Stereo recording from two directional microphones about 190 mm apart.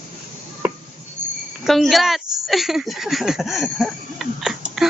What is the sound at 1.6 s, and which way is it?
Speech, centre (ahead or behind).